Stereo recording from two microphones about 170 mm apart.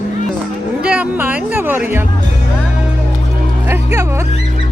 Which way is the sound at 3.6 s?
15° right (ahead or behind).